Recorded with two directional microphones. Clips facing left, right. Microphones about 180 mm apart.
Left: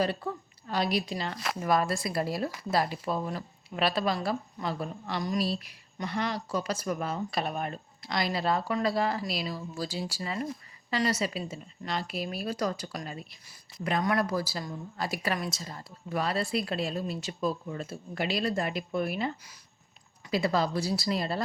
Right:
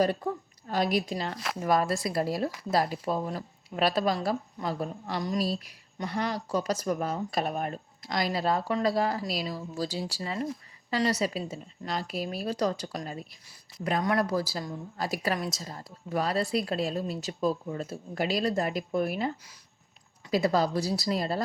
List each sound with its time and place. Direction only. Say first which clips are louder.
0.7 s a woman's voice: right 2 dB; 45° right (ahead or behind)
20.3 s speech: right 2 dB; 40° right (ahead or behind)